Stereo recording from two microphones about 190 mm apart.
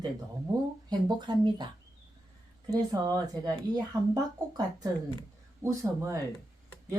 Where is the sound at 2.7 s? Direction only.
20° right (ahead or behind).